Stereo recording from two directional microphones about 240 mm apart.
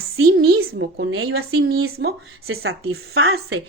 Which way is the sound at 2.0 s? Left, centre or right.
Right.